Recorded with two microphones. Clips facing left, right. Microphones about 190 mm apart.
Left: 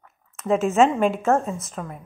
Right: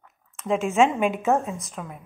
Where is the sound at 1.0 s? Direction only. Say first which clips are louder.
Left 2 dB; 15° right (ahead or behind).